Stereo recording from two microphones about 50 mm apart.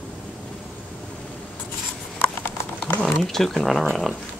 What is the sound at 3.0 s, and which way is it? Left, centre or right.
Speech, centre.